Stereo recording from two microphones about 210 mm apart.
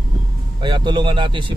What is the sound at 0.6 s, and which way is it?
Speech, 20° right (ahead or behind).